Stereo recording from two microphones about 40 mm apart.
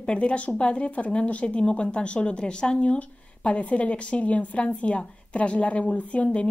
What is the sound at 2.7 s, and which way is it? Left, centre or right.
Speech, left.